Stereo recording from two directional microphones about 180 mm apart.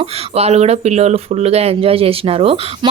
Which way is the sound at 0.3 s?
35° right (ahead or behind).